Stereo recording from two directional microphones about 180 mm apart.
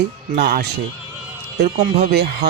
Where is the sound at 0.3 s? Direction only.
60° right (ahead or behind).